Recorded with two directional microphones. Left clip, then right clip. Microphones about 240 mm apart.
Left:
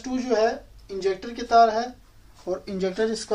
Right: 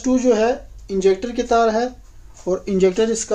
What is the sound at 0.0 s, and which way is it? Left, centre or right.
Speech, right.